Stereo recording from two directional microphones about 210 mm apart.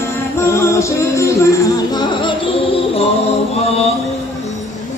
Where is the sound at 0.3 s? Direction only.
10° left (ahead or behind); by 3.8 s 30° left (ahead or behind).